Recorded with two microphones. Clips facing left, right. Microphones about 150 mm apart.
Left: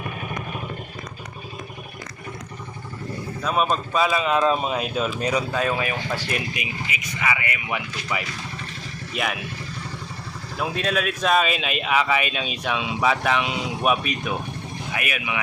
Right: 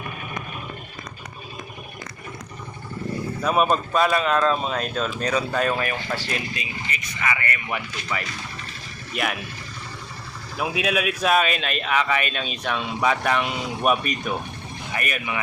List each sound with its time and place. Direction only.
3.4 s speech: 5° right (ahead or behind)
10.6 s speech: 5° right (ahead or behind)